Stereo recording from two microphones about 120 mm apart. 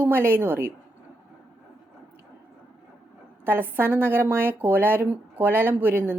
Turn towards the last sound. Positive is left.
turn(degrees=-20)  # may be behind; listen again after turning